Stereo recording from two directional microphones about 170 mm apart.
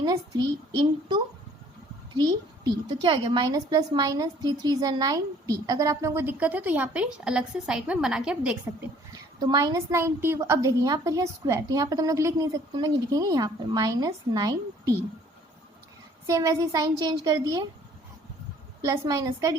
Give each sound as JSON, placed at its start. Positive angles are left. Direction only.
{"t": 0.0, "sound": "a woman's voice", "side_deg": -25}
{"t": 9.4, "sound": "a woman's voice", "side_deg": -25}
{"t": 16.2, "sound": "a woman's voice", "side_deg": -20}
{"t": 18.9, "sound": "a woman's voice", "side_deg": -20}